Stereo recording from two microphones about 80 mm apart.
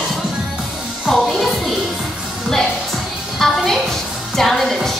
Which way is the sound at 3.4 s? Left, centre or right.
Centre.